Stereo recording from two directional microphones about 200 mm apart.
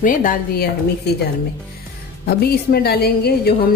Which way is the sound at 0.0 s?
40° left (ahead or behind).